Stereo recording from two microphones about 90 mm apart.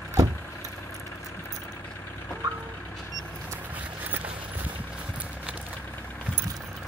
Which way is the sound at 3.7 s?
20° right (ahead or behind).